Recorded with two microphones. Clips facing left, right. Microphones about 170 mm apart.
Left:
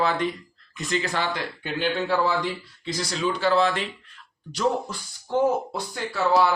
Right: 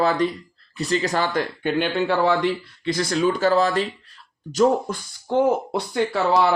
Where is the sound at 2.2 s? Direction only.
70° right (ahead or behind); by 5.0 s 45° right (ahead or behind).